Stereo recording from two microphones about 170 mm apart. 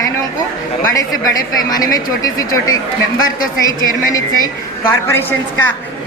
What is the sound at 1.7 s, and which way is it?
Speech, 20° left (ahead or behind).